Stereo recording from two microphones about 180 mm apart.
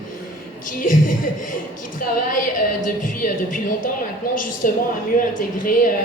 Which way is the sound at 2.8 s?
50° left (ahead or behind).